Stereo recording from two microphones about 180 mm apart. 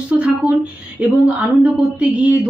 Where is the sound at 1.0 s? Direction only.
5° right (ahead or behind).